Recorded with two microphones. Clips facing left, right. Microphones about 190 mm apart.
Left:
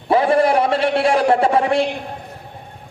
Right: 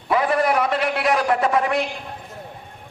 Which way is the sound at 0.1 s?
30° left (ahead or behind).